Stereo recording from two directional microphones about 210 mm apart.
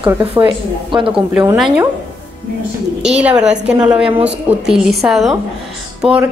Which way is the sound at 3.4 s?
5° right (ahead or behind).